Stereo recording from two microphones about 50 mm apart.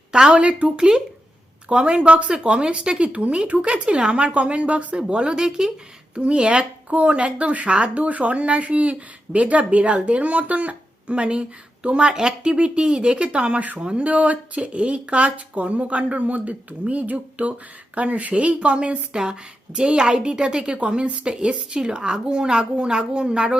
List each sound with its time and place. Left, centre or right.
0.1 s a woman's voice: centre